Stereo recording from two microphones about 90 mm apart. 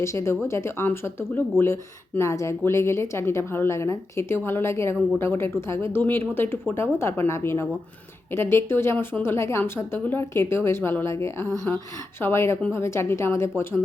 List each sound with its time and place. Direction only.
0.0 s speech: 30° left (ahead or behind)